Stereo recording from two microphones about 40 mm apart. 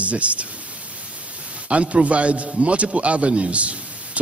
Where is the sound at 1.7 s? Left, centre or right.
Right.